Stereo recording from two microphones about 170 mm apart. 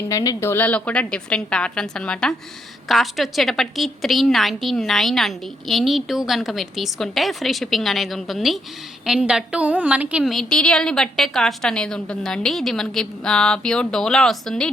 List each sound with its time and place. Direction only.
0.1 s a woman's voice: 20° left (ahead or behind); by 14.7 s 5° left (ahead or behind)